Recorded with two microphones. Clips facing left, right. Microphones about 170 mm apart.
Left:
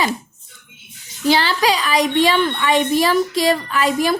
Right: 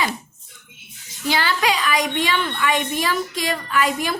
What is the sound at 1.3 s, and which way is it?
A woman's voice, 30° left (ahead or behind).